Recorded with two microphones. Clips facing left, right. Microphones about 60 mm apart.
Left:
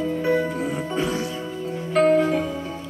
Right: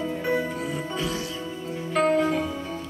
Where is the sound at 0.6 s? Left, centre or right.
Centre.